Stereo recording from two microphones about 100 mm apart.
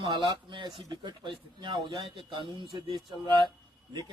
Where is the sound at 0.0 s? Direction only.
50° right (ahead or behind).